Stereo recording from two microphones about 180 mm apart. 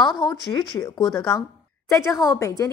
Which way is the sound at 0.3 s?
20° left (ahead or behind).